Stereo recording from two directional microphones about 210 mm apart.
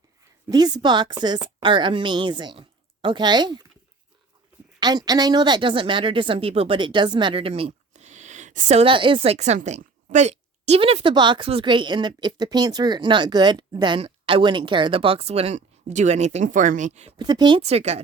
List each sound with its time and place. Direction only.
0.4 s speech: 20° right (ahead or behind)
4.8 s speech: 20° right (ahead or behind)
17.2 s speech: 20° right (ahead or behind)